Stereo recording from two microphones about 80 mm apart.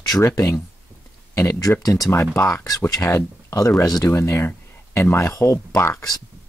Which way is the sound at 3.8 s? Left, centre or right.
Left.